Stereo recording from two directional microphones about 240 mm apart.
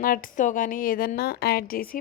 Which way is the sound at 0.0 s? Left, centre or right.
Left.